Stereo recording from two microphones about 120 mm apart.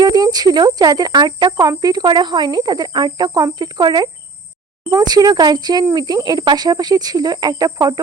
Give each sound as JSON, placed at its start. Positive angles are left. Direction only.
{"t": 0.0, "sound": "speech", "side_deg": -35}